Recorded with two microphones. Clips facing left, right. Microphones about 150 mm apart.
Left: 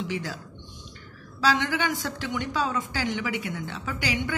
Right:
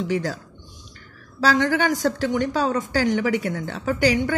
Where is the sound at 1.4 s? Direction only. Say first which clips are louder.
Right 5 dB; 45° right (ahead or behind).